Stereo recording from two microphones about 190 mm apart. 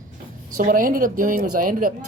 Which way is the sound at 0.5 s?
45° right (ahead or behind).